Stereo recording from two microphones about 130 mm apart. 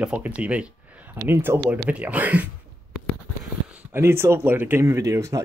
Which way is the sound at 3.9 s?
20° right (ahead or behind).